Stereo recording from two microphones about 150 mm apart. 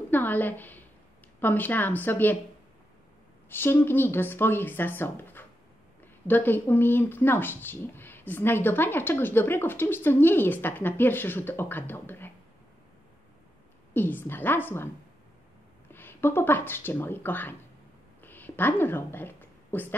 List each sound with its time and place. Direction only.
0.1 s a sound: 10° left (ahead or behind)
1.4 s speech: 10° left (ahead or behind)
3.4 s speech: 15° left (ahead or behind)
13.9 s speech: 15° left (ahead or behind)
15.9 s speech: 15° left (ahead or behind)
18.2 s a sound: 15° left (ahead or behind)